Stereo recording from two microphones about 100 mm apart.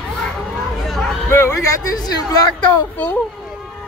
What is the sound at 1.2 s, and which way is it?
Speech, 25° left (ahead or behind).